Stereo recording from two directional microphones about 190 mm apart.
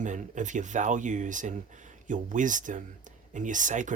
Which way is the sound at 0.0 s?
40° right (ahead or behind).